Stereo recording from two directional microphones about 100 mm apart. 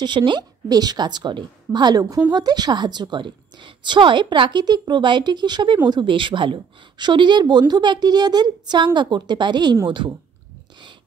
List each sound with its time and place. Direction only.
0.0 s a woman's voice: 50° right (ahead or behind)